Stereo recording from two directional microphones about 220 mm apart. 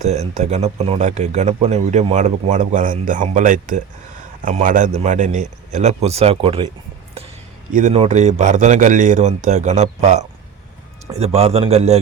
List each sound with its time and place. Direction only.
0.0 s speech: 30° right (ahead or behind)
7.7 s a man's voice: 35° right (ahead or behind)